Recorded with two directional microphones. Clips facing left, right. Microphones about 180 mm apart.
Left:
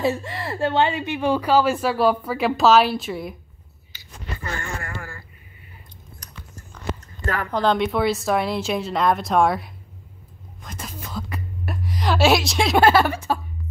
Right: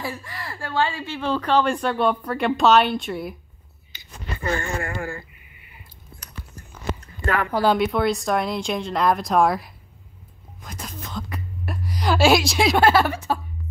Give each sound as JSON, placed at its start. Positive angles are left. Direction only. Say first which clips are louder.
{"t": 0.0, "sound": "speech", "louder": "left 8 dB", "side_deg": 25}
{"t": 3.9, "sound": "speech", "louder": "right 1 dB", "side_deg": -20}
{"t": 7.5, "sound": "a woman's voice", "louder": "even", "side_deg": -5}